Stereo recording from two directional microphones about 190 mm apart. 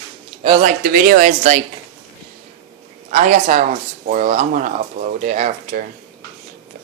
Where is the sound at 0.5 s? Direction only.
45° right (ahead or behind).